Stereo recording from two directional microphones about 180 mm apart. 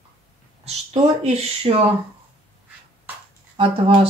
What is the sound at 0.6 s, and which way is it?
Speech, 40° right (ahead or behind).